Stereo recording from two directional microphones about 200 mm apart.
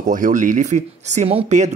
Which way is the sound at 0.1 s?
40° right (ahead or behind).